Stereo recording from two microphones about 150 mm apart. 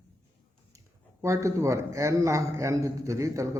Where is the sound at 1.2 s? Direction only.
20° right (ahead or behind).